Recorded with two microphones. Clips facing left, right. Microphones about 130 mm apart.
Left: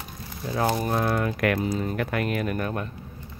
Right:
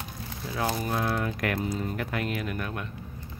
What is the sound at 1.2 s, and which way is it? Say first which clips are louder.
Speech: left 5 dB; 70° left (ahead or behind).